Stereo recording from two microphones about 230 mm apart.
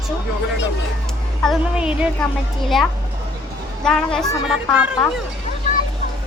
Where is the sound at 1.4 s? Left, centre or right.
Centre.